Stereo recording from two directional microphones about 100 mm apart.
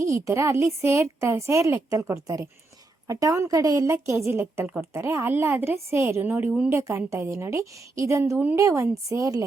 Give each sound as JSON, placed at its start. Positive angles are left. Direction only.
{"t": 0.0, "sound": "a woman's voice", "side_deg": -30}
{"t": 6.7, "sound": "a woman's voice", "side_deg": -30}